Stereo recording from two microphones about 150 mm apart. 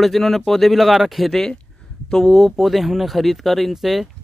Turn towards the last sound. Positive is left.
turn(degrees=0)  # may be behind; listen again after turning